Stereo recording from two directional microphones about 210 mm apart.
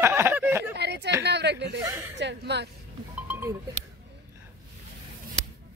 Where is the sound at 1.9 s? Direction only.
10° right (ahead or behind).